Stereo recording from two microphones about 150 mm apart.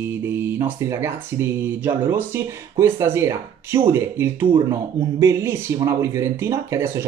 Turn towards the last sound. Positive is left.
turn(degrees=-15)  # may be behind; listen again after turning